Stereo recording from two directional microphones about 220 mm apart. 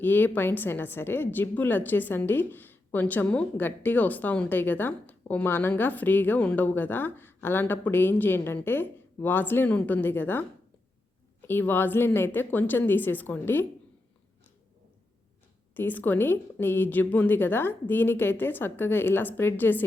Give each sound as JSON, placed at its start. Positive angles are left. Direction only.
{"t": 0.0, "sound": "a woman's voice", "side_deg": 10}
{"t": 11.4, "sound": "a woman's voice", "side_deg": 10}
{"t": 15.7, "sound": "a woman's voice", "side_deg": 10}